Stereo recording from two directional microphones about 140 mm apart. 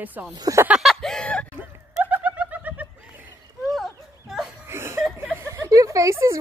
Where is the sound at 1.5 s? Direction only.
10° right (ahead or behind).